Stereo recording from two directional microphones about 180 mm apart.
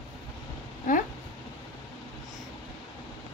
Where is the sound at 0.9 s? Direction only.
50° left (ahead or behind).